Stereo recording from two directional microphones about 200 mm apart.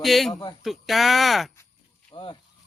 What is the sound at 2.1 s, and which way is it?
Speech, 25° left (ahead or behind).